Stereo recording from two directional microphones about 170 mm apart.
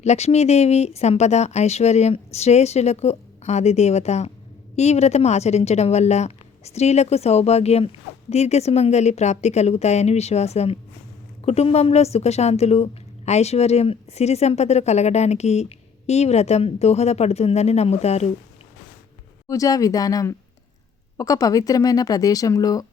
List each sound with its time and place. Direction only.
0.0 s speech: 40° left (ahead or behind)
19.5 s speech: 20° left (ahead or behind)